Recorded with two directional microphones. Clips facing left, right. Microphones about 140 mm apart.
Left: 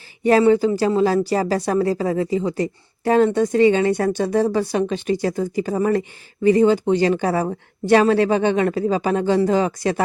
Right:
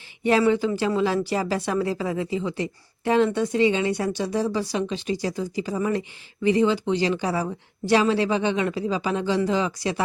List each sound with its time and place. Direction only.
0.2 s speech: 40° left (ahead or behind)